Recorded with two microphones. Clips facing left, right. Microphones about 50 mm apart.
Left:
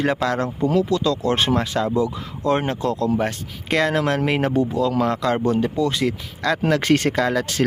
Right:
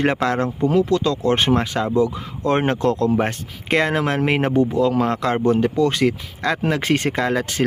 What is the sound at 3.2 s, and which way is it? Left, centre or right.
Speech, right.